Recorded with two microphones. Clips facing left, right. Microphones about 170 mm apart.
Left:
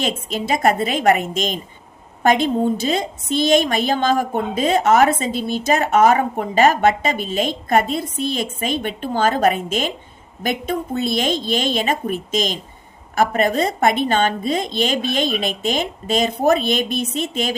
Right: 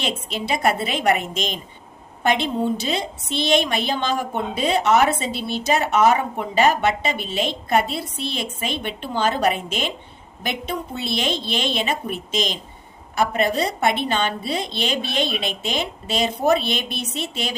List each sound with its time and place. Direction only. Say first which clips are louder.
0.0 s a woman's voice: left 4 dB; 45° left (ahead or behind)